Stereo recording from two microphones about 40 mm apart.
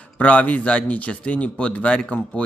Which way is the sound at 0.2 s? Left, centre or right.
Left.